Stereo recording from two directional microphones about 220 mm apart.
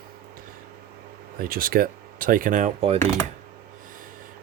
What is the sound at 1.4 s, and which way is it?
Speech, 40° right (ahead or behind).